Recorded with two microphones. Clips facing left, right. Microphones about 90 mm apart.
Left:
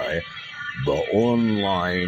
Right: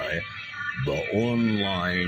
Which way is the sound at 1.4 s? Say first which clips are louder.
Left 3 dB; 40° left (ahead or behind).